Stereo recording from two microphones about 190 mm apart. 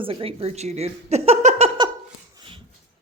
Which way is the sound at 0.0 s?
30° right (ahead or behind).